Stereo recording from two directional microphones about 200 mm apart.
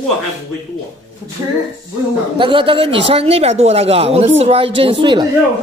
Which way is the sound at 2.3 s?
25° right (ahead or behind).